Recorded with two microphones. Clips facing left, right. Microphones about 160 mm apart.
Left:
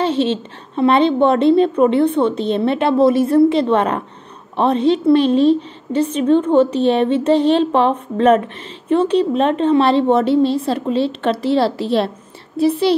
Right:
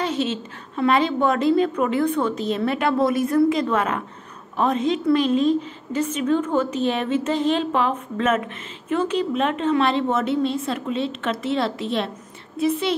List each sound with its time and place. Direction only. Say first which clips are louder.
0.0 s a woman's voice: left 7 dB; 30° left (ahead or behind)